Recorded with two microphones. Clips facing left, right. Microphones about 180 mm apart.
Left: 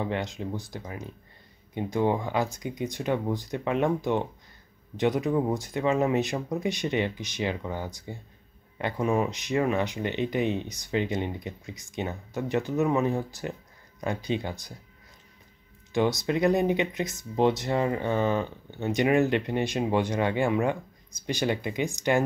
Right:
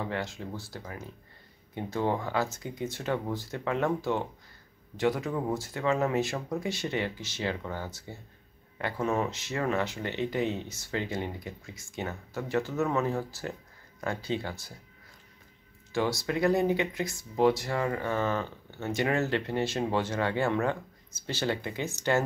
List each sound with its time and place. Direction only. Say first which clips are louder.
0.0 s speech: left 4 dB; 20° left (ahead or behind)
15.9 s speech: left 4 dB; 20° left (ahead or behind)